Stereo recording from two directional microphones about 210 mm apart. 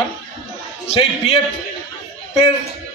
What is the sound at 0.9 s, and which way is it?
Speech, 25° left (ahead or behind).